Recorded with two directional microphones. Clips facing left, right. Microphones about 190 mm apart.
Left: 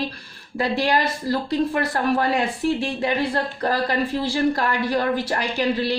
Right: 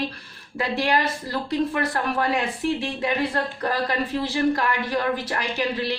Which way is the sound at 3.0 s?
35° left (ahead or behind).